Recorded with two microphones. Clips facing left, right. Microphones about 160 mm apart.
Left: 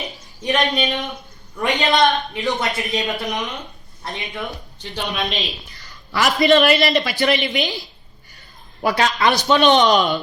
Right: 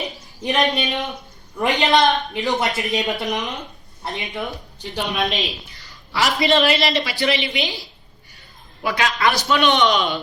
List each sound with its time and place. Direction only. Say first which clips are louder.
0.0 s a woman's voice: right 1 dB; centre (ahead or behind)
5.7 s a sound: left 2 dB; 45° left (ahead or behind)
6.4 s a woman's voice: left 4 dB; 50° left (ahead or behind)
9.1 s a man's voice: left 2 dB; 20° left (ahead or behind)
9.6 s a woman's voice: left 4 dB; 40° left (ahead or behind)